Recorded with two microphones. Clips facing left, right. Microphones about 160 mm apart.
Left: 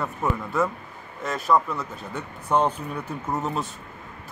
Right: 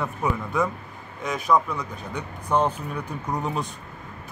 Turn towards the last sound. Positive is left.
turn(degrees=5)  # may be behind; listen again after turning